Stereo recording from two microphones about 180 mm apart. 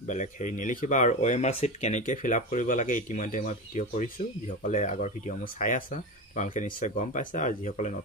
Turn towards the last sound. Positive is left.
turn(degrees=40)  # may be behind; listen again after turning